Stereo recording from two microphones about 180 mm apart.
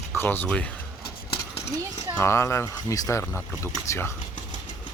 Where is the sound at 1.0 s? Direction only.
60° left (ahead or behind).